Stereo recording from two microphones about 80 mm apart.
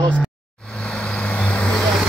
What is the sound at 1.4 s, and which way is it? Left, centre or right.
Vehicle, centre.